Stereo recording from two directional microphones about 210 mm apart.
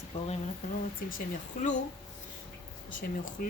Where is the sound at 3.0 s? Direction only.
40° left (ahead or behind).